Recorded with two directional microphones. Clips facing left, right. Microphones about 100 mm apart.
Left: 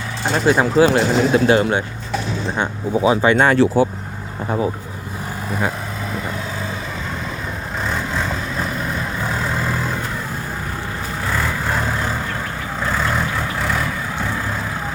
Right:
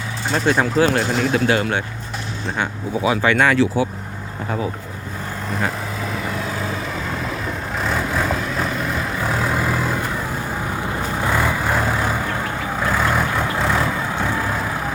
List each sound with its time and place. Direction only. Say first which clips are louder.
0.3 s speech: left 3 dB; 10° left (ahead or behind); by 3.4 s 25° left (ahead or behind)
3.4 s speech: left 2 dB; 35° left (ahead or behind)
7.8 s vehicle: right 1 dB; centre (ahead or behind)
11.2 s vehicle: right 2 dB; 15° right (ahead or behind)
13.1 s vehicle: right 2 dB; 20° right (ahead or behind)